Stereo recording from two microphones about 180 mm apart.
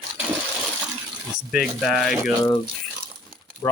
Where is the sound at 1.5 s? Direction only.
5° right (ahead or behind).